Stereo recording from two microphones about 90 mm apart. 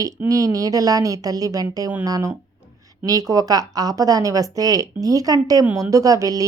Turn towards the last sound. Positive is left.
turn(degrees=-40)  # may be behind; listen again after turning